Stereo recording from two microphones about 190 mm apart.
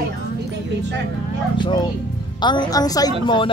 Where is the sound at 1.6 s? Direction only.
25° left (ahead or behind).